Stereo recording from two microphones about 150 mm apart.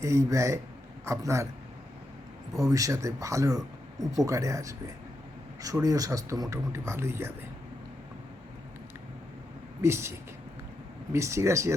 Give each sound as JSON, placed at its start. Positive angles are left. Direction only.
{"t": 0.0, "sound": "speech", "side_deg": -20}
{"t": 2.5, "sound": "speech", "side_deg": -25}
{"t": 9.8, "sound": "speech", "side_deg": -20}